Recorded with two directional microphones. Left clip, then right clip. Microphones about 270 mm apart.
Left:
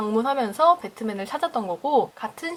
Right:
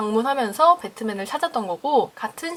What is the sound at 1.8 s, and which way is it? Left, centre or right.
Speech, left.